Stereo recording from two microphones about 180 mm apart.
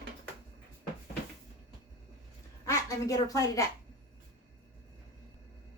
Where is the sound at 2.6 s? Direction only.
15° left (ahead or behind).